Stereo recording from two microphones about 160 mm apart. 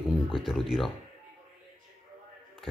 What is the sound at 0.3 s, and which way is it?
Speech, centre (ahead or behind).